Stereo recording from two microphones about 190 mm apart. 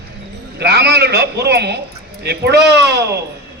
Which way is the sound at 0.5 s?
60° right (ahead or behind).